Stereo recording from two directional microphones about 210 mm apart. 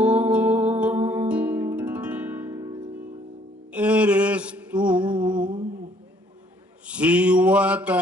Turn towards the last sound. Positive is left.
turn(degrees=-5)  # may be behind; listen again after turning